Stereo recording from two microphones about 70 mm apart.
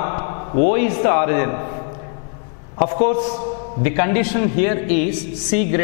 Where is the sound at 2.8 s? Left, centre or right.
Centre.